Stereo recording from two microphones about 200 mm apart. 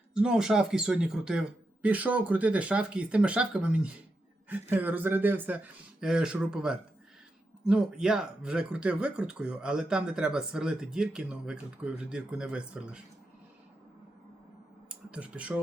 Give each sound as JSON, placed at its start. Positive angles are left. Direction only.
{"t": 0.1, "sound": "speech", "side_deg": -5}
{"t": 14.8, "sound": "speech", "side_deg": -5}